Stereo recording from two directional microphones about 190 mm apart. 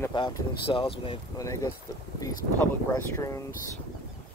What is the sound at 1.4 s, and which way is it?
Speech, 15° left (ahead or behind).